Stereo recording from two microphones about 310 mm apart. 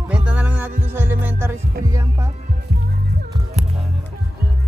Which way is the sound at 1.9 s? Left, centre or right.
Centre.